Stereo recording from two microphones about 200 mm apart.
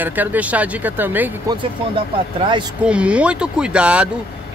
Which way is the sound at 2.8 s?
5° right (ahead or behind).